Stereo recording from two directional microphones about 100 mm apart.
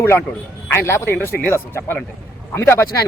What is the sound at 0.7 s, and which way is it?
Speech, 25° left (ahead or behind).